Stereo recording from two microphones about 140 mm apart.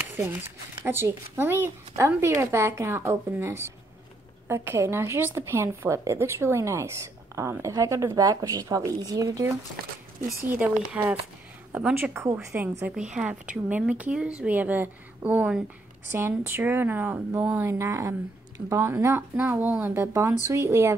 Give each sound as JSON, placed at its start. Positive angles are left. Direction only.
{"t": 0.8, "sound": "a woman's voice", "side_deg": -20}
{"t": 10.5, "sound": "a woman's voice", "side_deg": -10}
{"t": 12.8, "sound": "a woman's voice", "side_deg": -5}